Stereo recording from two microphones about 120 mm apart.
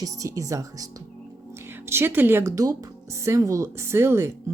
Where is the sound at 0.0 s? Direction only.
30° right (ahead or behind).